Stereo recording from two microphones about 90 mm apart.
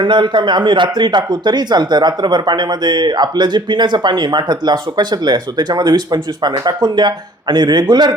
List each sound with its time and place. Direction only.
0.0 s speech: 60° right (ahead or behind)